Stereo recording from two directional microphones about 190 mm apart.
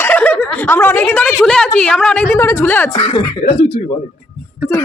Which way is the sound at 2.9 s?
30° left (ahead or behind).